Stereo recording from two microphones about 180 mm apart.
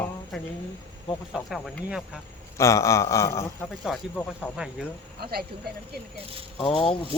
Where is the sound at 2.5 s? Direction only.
15° left (ahead or behind).